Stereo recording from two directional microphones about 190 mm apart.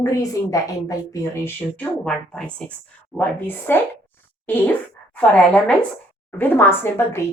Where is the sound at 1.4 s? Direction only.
5° left (ahead or behind).